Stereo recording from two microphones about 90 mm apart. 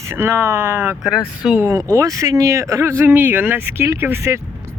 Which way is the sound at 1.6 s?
35° right (ahead or behind).